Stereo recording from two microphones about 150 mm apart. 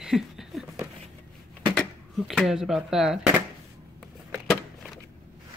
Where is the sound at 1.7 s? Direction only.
5° left (ahead or behind).